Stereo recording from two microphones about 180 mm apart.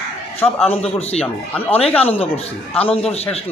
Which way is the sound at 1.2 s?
10° left (ahead or behind).